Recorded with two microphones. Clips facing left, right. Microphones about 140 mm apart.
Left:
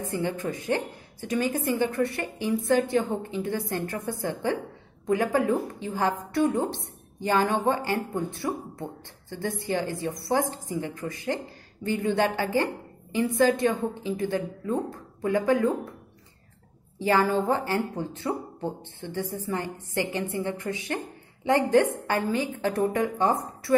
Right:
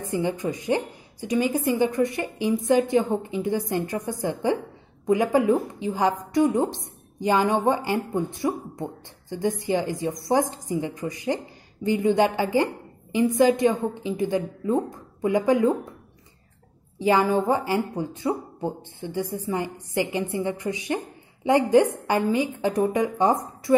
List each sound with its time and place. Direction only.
0.1 s a woman's voice: 15° right (ahead or behind)
17.0 s a woman's voice: 15° right (ahead or behind)